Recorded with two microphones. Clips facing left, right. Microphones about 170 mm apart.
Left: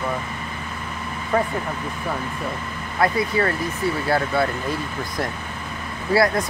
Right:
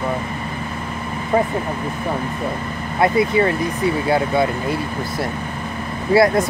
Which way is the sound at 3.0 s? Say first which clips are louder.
Right 5 dB; 20° right (ahead or behind).